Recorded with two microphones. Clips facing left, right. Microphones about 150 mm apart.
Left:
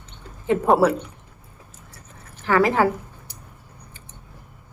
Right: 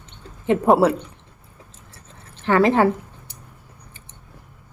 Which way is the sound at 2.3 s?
25° right (ahead or behind).